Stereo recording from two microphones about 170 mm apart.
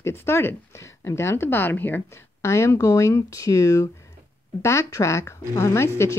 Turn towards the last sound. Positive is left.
turn(degrees=15)  # may be behind; listen again after turning